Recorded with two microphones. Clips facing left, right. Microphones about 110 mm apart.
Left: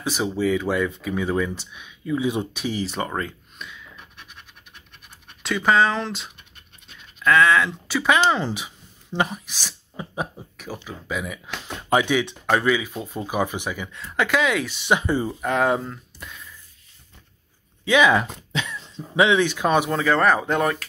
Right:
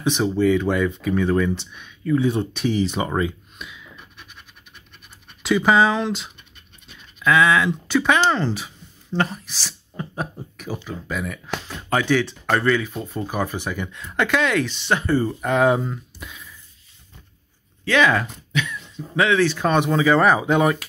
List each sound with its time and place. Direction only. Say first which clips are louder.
0.0 s speech: right 4 dB; 5° left (ahead or behind)
5.4 s speech: right 2 dB; 5° right (ahead or behind); by 13.7 s 15° left (ahead or behind)
13.7 s speech: right 2 dB; centre (ahead or behind)
15.4 s speech: right 2 dB; centre (ahead or behind)
17.8 s speech: left 1 dB; 15° left (ahead or behind)
18.5 s cough: right 3 dB; 30° left (ahead or behind)
19.1 s speech: even; 20° left (ahead or behind); by 20.8 s 5° right (ahead or behind)